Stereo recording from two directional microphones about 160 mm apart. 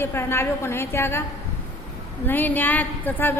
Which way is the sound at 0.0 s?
15° left (ahead or behind).